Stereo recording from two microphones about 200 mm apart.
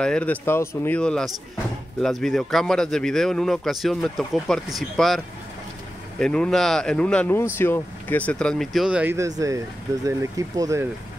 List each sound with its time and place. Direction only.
0.0 s a man's voice: 5° left (ahead or behind); by 10.9 s 15° right (ahead or behind)